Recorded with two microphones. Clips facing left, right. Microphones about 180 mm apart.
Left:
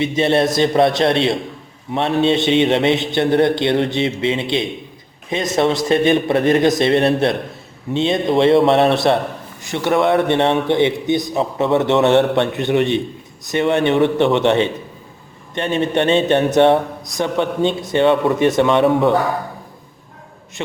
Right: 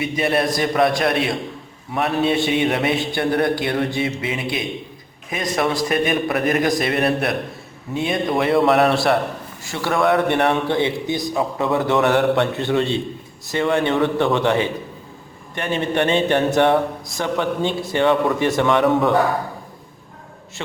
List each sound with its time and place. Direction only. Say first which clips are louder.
0.0 s a man's voice: left 4 dB; 25° left (ahead or behind)